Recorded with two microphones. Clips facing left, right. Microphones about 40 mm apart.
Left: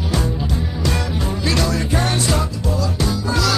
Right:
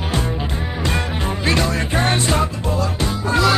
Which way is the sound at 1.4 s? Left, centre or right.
Right.